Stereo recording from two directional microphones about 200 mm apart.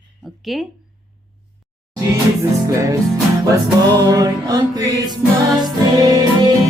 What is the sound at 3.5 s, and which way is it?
Music, 20° right (ahead or behind).